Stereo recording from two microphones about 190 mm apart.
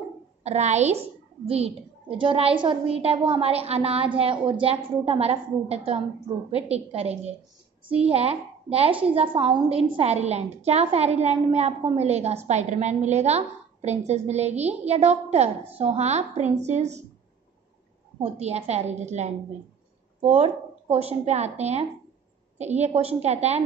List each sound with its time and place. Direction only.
0.4 s a woman's voice: 35° right (ahead or behind)
18.2 s a woman's voice: 35° right (ahead or behind)